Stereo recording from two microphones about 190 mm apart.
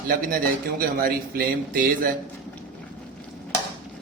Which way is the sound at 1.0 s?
50° right (ahead or behind).